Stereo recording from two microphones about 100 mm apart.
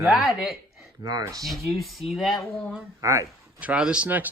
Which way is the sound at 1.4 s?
Centre (ahead or behind).